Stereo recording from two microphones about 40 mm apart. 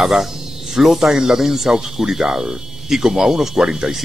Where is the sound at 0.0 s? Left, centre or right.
Centre.